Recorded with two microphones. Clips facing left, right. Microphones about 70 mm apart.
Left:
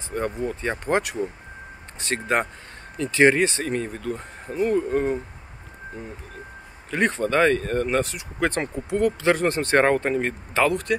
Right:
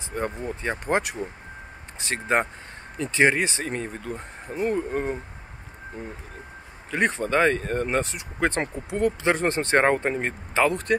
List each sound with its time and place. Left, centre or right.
0.1 s speech: centre
2.3 s speech: right
4.7 s speech: centre
6.9 s speech: centre